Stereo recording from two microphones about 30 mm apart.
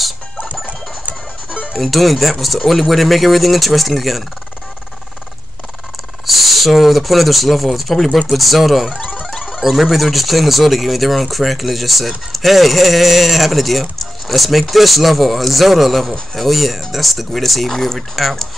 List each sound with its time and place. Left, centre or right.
0.7 s music: right
1.8 s speech: centre
6.2 s speech: centre